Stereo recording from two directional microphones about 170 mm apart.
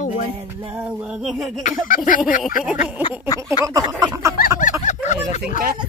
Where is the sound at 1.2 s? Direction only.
Centre (ahead or behind).